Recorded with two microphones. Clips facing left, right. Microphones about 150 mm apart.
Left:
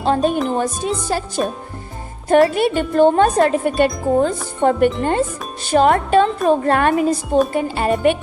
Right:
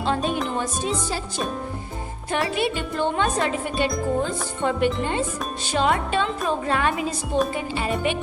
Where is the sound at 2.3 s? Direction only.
50° left (ahead or behind).